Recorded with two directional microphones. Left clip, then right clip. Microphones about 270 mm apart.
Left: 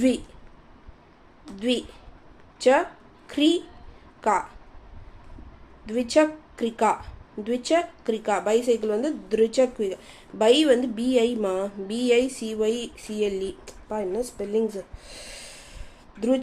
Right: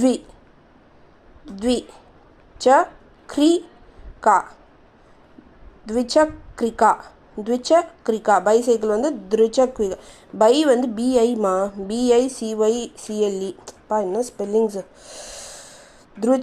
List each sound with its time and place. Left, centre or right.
1.5 s a woman's voice: centre
5.8 s a woman's voice: centre